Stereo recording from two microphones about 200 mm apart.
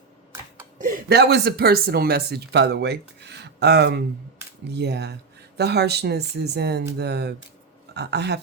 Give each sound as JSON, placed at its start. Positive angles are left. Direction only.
{"t": 0.8, "sound": "speech", "side_deg": -45}